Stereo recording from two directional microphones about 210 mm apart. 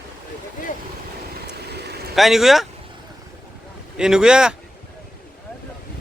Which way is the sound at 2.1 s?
Centre (ahead or behind).